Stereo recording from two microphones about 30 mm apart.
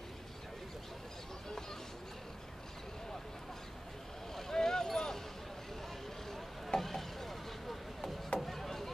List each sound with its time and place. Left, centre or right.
4.4 s vehicle: centre
6.3 s vehicle: centre
8.4 s chop: centre